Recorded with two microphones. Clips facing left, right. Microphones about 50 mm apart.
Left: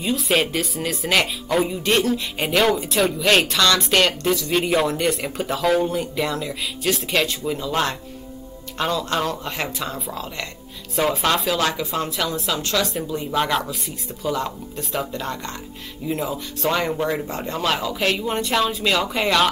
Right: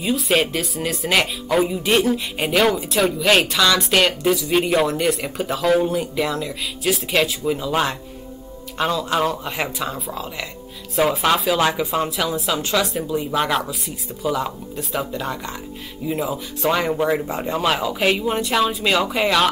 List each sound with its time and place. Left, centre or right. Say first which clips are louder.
0.0 s speech: right 1 dB; centre